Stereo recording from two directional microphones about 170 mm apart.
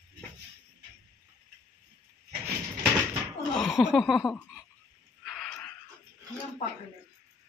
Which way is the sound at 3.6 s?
Centre (ahead or behind).